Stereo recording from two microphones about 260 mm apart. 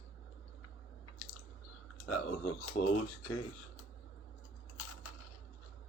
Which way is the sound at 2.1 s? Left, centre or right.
Left.